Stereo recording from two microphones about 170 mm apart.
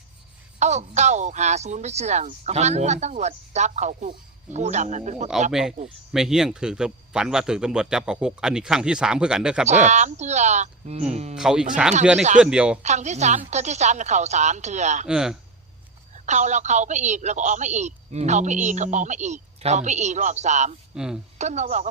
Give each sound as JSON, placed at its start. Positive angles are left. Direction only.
{"t": 0.6, "sound": "speech", "side_deg": -40}
{"t": 5.5, "sound": "speech", "side_deg": -5}
{"t": 9.6, "sound": "speech", "side_deg": -45}
{"t": 11.3, "sound": "speech", "side_deg": -5}
{"t": 12.8, "sound": "speech", "side_deg": -40}
{"t": 15.0, "sound": "speech", "side_deg": -5}
{"t": 16.2, "sound": "speech", "side_deg": -45}
{"t": 20.9, "sound": "a woman's voice", "side_deg": -5}
{"t": 21.3, "sound": "speech", "side_deg": -40}